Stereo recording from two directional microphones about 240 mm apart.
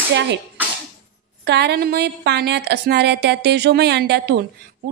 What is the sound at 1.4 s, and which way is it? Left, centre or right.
A woman's voice, right.